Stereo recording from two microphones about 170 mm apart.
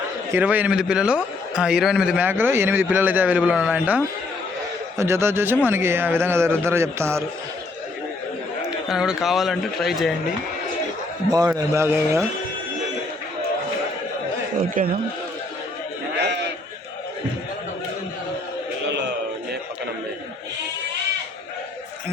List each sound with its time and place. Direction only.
0.3 s a man's voice: 10° right (ahead or behind)
8.9 s speech: 5° right (ahead or behind)
11.3 s a man's voice: 25° right (ahead or behind)
14.8 s a man's voice: 55° right (ahead or behind)
16.1 s sheep: 80° right